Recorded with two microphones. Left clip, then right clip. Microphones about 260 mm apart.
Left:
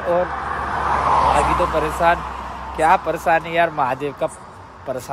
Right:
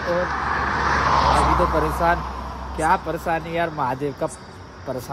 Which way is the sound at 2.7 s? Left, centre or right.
Centre.